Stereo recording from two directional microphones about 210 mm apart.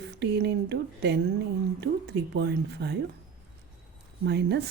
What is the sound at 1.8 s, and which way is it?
Speech, 55° right (ahead or behind).